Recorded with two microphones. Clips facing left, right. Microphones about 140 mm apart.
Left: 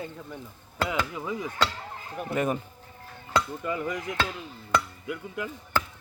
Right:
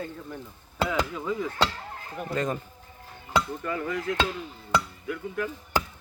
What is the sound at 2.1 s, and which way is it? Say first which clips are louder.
Speech: left 1 dB; 10° left (ahead or behind).